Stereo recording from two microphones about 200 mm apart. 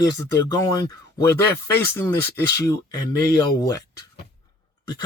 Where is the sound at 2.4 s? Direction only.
15° left (ahead or behind).